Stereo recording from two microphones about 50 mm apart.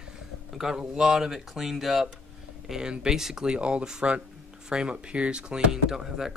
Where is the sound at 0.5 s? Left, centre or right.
Centre.